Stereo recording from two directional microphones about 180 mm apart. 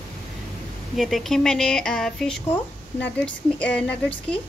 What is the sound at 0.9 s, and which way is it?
A woman's voice, centre (ahead or behind).